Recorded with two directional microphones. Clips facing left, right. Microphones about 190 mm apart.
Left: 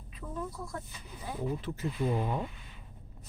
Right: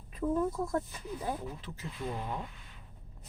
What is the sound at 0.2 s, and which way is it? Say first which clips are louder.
Speech: right 9 dB; 50° right (ahead or behind).